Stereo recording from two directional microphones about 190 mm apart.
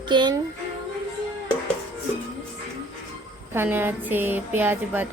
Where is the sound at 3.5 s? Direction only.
10° right (ahead or behind).